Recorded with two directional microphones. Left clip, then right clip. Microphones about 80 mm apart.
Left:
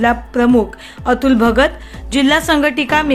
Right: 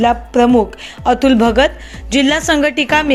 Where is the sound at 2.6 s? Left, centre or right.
Right.